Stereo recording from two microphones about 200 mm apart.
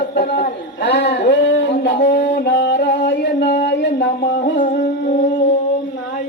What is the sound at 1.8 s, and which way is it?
Speech, 40° left (ahead or behind).